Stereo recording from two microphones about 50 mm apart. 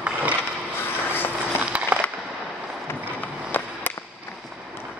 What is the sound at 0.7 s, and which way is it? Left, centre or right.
Vehicle, left.